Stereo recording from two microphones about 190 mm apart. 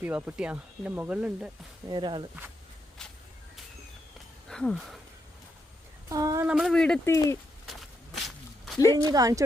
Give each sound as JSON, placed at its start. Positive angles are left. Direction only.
{"t": 0.0, "sound": "speech", "side_deg": -10}
{"t": 1.9, "sound": "speech", "side_deg": -25}
{"t": 3.0, "sound": "a sound", "side_deg": 5}
{"t": 4.4, "sound": "speech", "side_deg": 5}
{"t": 6.1, "sound": "speech", "side_deg": -20}
{"t": 6.4, "sound": "speech", "side_deg": -5}
{"t": 7.7, "sound": "walk", "side_deg": 0}
{"t": 9.0, "sound": "speech", "side_deg": -20}